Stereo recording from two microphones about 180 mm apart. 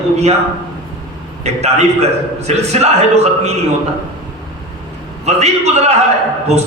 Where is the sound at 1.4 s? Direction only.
35° right (ahead or behind).